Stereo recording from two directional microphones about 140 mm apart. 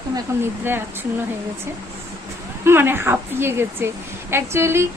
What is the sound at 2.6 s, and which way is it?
Speech, 15° right (ahead or behind).